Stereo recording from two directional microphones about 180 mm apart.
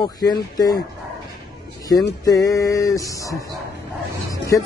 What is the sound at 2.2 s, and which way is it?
A man's voice, 20° left (ahead or behind).